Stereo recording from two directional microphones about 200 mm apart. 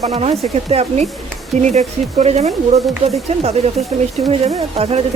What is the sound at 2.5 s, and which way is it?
Speech, centre (ahead or behind).